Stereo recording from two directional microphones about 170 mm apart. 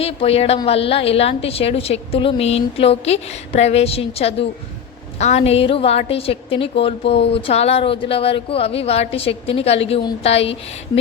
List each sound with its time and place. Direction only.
0.0 s a woman's voice: 35° left (ahead or behind)